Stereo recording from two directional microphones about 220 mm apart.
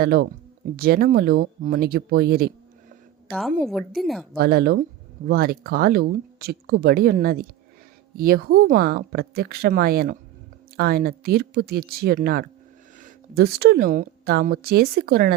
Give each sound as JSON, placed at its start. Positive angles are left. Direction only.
{"t": 0.0, "sound": "speech", "side_deg": -45}
{"t": 3.6, "sound": "a woman's voice", "side_deg": 0}
{"t": 4.4, "sound": "speech", "side_deg": -45}